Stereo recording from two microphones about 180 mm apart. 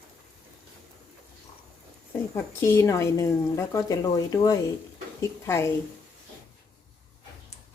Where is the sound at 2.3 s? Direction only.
15° left (ahead or behind).